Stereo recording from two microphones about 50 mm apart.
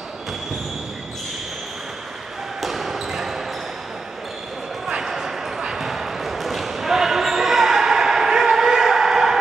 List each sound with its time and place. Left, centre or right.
2.6 s basketball bounce: centre
4.8 s basketball bounce: centre